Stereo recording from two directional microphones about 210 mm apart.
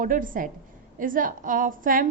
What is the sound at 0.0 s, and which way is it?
A woman's voice, 40° right (ahead or behind).